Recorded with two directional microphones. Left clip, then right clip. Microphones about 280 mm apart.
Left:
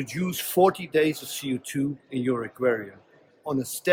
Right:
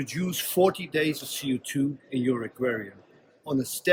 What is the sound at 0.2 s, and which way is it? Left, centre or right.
Speech, centre.